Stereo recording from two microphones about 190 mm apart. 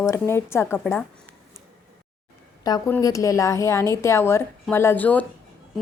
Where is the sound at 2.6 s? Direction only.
20° left (ahead or behind).